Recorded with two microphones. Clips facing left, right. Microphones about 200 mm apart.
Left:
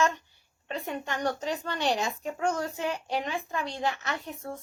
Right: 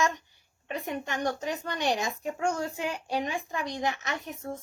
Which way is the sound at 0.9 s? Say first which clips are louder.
Even; 15° right (ahead or behind).